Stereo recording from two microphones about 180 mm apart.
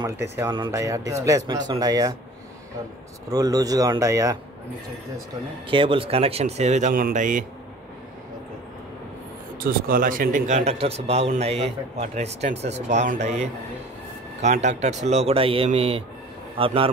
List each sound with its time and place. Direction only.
0.0 s speech: 15° right (ahead or behind)
3.3 s speech: 20° right (ahead or behind)
5.7 s speech: 30° right (ahead or behind); by 7.4 s 45° right (ahead or behind)
9.6 s speech: 55° right (ahead or behind); by 16.9 s 30° right (ahead or behind)